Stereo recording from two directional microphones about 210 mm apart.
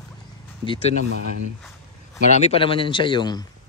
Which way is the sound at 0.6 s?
25° left (ahead or behind).